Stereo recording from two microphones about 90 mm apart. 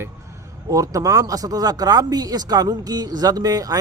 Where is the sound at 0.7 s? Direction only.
40° right (ahead or behind).